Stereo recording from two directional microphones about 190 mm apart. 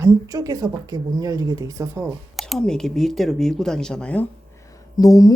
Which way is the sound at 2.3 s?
Centre (ahead or behind).